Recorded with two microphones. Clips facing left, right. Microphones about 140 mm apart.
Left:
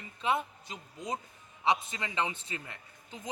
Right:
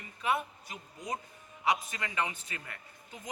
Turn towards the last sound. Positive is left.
turn(degrees=25)  # may be behind; listen again after turning